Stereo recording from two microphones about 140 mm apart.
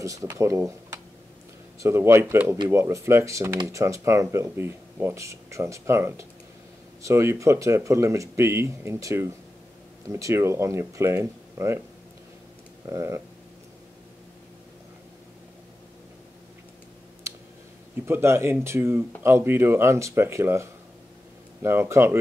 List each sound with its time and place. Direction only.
0.0 s speech: 20° right (ahead or behind)
12.8 s speech: 20° right (ahead or behind)
18.0 s speech: 20° right (ahead or behind)
21.6 s speech: 20° right (ahead or behind)